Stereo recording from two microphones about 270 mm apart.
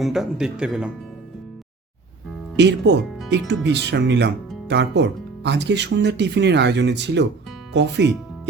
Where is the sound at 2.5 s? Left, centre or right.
Right.